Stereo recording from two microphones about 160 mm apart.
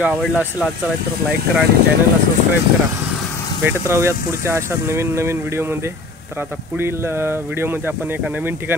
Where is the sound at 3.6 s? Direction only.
15° right (ahead or behind).